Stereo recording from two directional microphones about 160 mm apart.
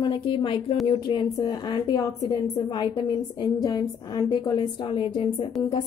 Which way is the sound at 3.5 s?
25° left (ahead or behind).